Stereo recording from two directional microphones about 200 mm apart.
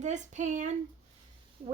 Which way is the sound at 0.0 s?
35° right (ahead or behind).